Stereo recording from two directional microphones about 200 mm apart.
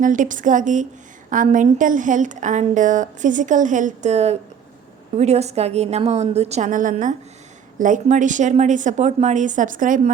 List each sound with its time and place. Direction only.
0.0 s a woman's voice: 40° right (ahead or behind)